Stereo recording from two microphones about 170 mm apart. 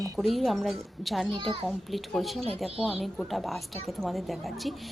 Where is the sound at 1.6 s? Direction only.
Centre (ahead or behind).